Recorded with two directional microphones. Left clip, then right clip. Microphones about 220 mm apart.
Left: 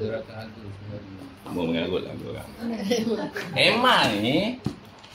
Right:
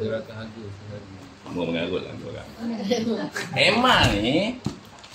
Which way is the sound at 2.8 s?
15° left (ahead or behind).